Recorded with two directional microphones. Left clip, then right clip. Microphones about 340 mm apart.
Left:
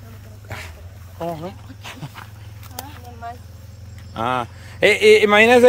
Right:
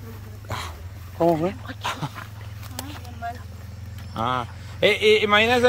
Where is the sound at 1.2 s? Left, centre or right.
Right.